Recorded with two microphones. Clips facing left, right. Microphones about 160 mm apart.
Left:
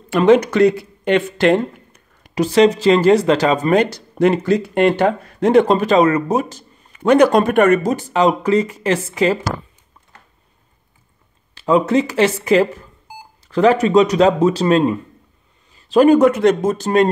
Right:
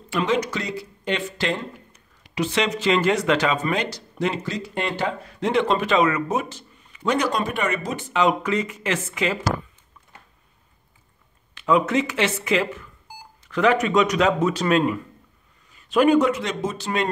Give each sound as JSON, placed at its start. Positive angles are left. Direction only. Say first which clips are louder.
{"t": 0.1, "sound": "speech", "louder": "left 11 dB", "side_deg": 55}
{"t": 11.5, "sound": "speech", "louder": "left 5 dB", "side_deg": 35}